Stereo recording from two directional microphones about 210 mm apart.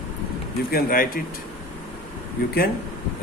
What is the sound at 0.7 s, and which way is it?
Speech, 45° left (ahead or behind).